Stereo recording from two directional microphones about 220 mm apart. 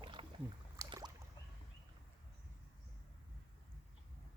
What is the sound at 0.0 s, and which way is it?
Rowboat, 25° right (ahead or behind).